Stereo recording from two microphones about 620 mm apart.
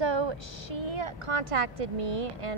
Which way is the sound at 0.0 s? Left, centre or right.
Right.